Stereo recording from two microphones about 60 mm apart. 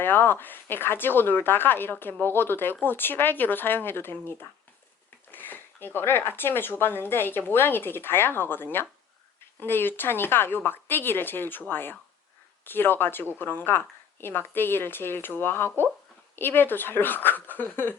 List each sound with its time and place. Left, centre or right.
0.0 s speech: left